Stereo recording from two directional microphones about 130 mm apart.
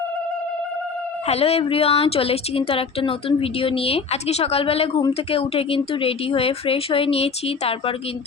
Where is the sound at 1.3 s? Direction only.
50° left (ahead or behind).